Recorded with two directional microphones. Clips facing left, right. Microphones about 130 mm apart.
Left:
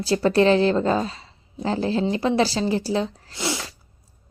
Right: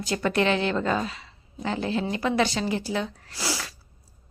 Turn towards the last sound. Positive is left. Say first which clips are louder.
# left 4 dB
turn(degrees=25)  # may be behind; listen again after turning